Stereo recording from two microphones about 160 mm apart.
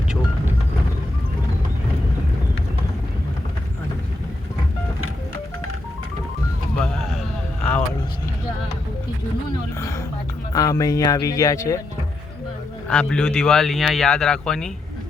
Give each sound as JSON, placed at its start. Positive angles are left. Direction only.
{"t": 6.7, "sound": "vehicle", "side_deg": 0}
{"t": 10.5, "sound": "speech", "side_deg": 20}
{"t": 12.9, "sound": "speech", "side_deg": 5}